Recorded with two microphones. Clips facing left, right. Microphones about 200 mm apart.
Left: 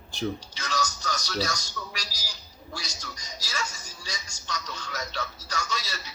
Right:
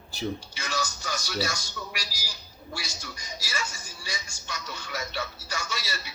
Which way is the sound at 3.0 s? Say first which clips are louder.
Right 1 dB; 15° right (ahead or behind).